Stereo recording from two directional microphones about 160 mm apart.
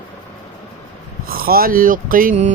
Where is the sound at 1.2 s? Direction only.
65° right (ahead or behind).